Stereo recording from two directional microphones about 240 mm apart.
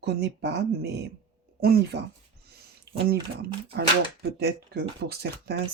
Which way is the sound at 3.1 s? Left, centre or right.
Right.